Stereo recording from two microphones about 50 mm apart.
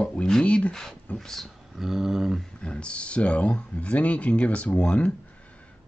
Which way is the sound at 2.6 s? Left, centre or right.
Left.